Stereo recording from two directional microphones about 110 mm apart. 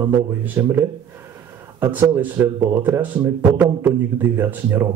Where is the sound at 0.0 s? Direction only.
15° right (ahead or behind).